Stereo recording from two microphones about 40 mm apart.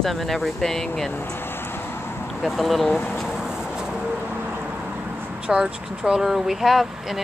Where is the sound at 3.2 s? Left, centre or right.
Centre.